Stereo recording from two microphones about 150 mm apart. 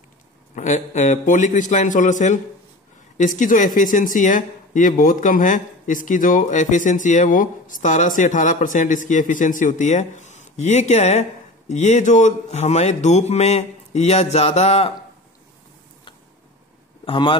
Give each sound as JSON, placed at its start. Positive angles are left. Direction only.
{"t": 0.6, "sound": "speech", "side_deg": 55}
{"t": 17.0, "sound": "speech", "side_deg": 35}